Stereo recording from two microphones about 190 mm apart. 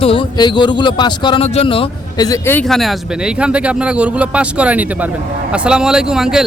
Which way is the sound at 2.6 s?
Centre (ahead or behind).